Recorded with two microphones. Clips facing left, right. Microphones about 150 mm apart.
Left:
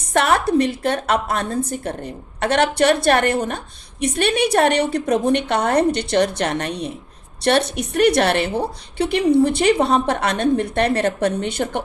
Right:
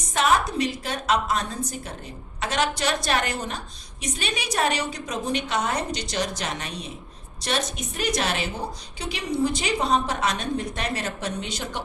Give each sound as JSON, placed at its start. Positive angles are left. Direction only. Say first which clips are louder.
{"t": 0.1, "sound": "a woman's voice", "louder": "left 5 dB", "side_deg": 65}